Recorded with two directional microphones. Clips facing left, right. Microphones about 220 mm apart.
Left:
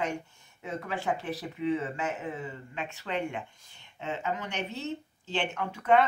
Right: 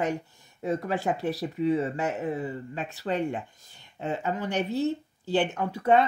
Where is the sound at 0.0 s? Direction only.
35° right (ahead or behind).